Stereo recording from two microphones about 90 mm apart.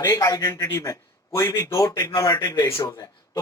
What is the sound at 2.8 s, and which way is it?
Speech, 40° left (ahead or behind).